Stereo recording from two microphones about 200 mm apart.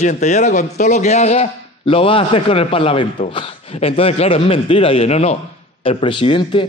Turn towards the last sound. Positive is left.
turn(degrees=25)  # may be behind; listen again after turning